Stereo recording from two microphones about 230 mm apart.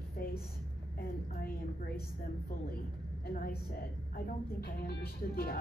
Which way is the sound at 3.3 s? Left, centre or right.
Left.